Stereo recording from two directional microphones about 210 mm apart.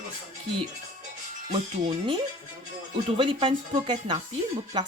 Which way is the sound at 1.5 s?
30° right (ahead or behind).